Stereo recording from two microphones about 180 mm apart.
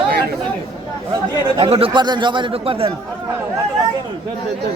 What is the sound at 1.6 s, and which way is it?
A man's voice, 30° right (ahead or behind).